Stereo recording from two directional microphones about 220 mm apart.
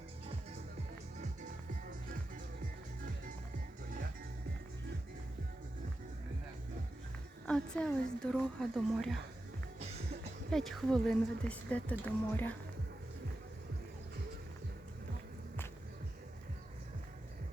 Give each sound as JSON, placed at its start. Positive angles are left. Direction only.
{"t": 7.4, "sound": "a woman's voice", "side_deg": 5}
{"t": 10.5, "sound": "a woman's voice", "side_deg": 0}